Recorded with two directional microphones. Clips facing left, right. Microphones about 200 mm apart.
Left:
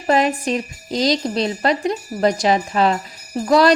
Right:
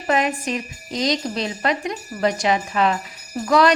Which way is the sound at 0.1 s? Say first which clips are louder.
Left 4 dB; 35° left (ahead or behind).